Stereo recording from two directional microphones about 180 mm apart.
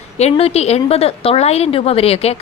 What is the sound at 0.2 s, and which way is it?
A woman's voice, 35° left (ahead or behind).